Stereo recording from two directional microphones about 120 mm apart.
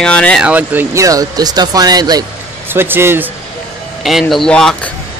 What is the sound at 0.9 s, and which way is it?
Speech, 30° right (ahead or behind).